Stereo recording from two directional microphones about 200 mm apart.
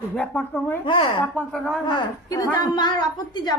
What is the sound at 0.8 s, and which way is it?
Speech, 25° left (ahead or behind).